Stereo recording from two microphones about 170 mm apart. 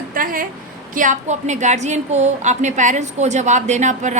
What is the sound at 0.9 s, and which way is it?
A woman's voice, 45° right (ahead or behind).